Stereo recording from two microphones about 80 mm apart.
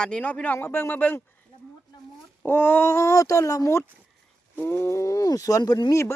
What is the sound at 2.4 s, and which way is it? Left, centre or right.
Speech, left.